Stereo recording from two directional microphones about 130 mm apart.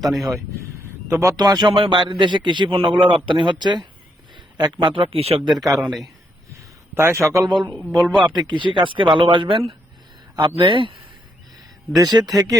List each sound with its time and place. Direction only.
0.0 s speech: centre (ahead or behind)
1.1 s a man's voice: 25° right (ahead or behind); by 5.4 s 45° right (ahead or behind)
6.9 s a man's voice: 20° right (ahead or behind)
7.9 s speech: 5° right (ahead or behind)
8.4 s a man's voice: 40° right (ahead or behind)
11.9 s a man's voice: 30° right (ahead or behind)